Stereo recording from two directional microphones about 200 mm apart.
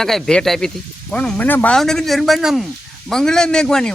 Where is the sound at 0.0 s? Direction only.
Centre (ahead or behind).